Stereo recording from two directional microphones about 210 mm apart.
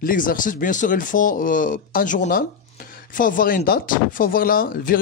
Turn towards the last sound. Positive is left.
turn(degrees=40)  # may be behind; listen again after turning